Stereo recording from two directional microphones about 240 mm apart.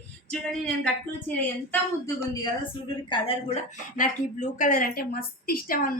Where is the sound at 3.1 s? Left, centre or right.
Left.